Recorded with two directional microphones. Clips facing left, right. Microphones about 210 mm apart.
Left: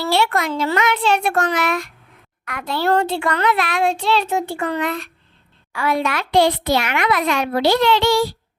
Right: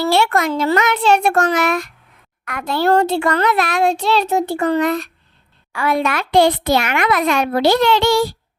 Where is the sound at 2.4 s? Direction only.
45° right (ahead or behind).